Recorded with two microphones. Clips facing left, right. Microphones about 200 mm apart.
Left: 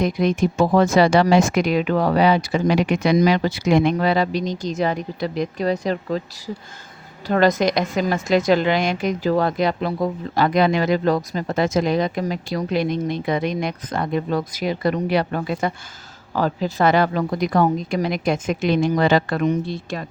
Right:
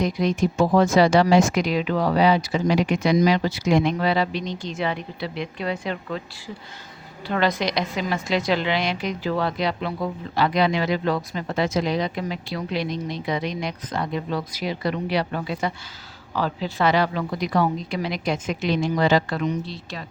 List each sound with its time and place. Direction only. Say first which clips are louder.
0.0 s a woman's voice: left 3 dB; 55° left (ahead or behind); by 6.2 s 35° left (ahead or behind)
7.3 s a woman's voice: left 6 dB; 45° left (ahead or behind)